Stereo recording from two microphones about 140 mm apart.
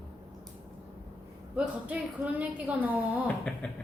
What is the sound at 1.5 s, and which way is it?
A woman's voice, 10° right (ahead or behind).